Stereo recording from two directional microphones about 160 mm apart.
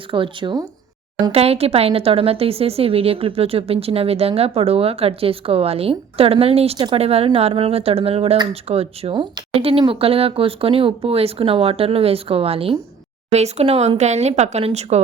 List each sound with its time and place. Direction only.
0.1 s a woman's voice: 30° right (ahead or behind)